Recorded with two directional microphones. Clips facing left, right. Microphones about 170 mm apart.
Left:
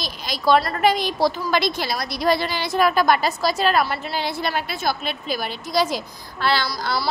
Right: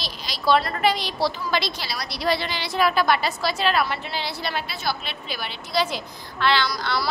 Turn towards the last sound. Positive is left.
turn(degrees=40)  # may be behind; listen again after turning